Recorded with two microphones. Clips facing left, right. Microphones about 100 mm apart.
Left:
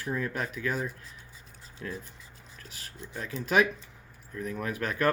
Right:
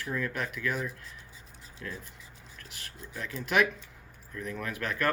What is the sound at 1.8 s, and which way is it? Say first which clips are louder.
Speech: left 3 dB; 20° left (ahead or behind).